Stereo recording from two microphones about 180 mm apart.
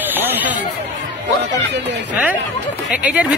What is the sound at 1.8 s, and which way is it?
Speech, 75° right (ahead or behind).